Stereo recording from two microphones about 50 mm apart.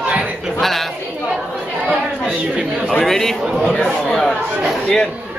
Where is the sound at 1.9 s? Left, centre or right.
Centre.